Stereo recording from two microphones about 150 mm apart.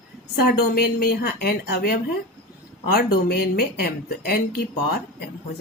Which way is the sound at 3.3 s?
90° left.